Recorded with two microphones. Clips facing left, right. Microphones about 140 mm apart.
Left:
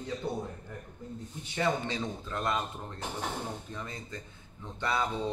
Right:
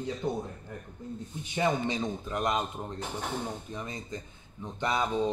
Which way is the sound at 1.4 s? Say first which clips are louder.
Right 2 dB; 15° right (ahead or behind).